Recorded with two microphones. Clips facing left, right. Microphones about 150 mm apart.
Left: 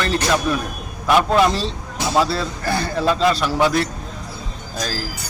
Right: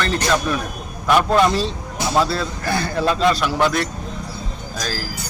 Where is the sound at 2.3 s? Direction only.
30° left (ahead or behind).